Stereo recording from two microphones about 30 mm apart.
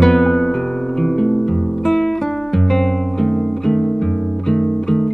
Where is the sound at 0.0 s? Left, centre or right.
Centre.